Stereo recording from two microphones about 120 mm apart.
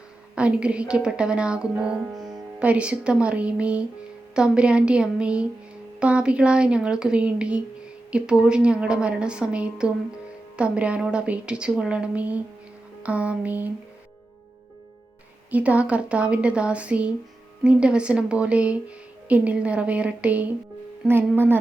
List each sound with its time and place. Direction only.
0.3 s speech: 10° right (ahead or behind)
15.4 s speech: 10° right (ahead or behind)